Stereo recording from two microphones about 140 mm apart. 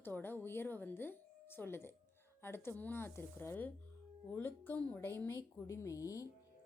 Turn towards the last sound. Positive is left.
turn(degrees=25)  # may be behind; listen again after turning